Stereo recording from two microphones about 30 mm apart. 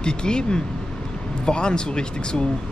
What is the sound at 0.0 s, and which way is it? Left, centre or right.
Speech, left.